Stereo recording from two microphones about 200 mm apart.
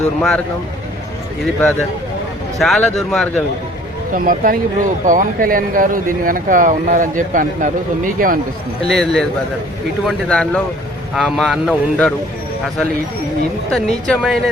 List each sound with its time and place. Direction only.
0.2 s speech: 5° left (ahead or behind)
2.6 s speech: centre (ahead or behind)
4.1 s speech: 45° right (ahead or behind)
8.9 s speech: centre (ahead or behind)
13.7 s speech: 5° left (ahead or behind)